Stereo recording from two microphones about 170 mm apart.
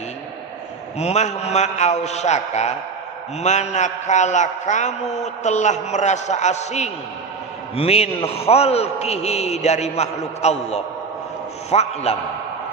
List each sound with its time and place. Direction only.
0.9 s a man's voice: 40° left (ahead or behind)